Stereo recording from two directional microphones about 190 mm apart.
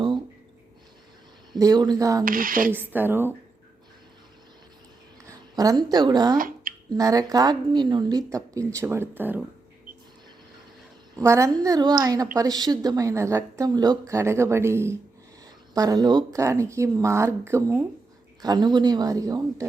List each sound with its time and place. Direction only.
1.5 s a woman's voice: 20° right (ahead or behind)
2.2 s speech: 45° right (ahead or behind)
2.9 s a woman's voice: 10° right (ahead or behind)
5.3 s a woman's voice: 20° right (ahead or behind)
6.3 s a sound: 50° right (ahead or behind)
6.9 s a woman's voice: 20° right (ahead or behind)
11.2 s a woman's voice: 15° right (ahead or behind)